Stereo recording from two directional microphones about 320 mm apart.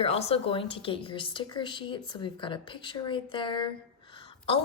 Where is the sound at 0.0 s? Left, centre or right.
Centre.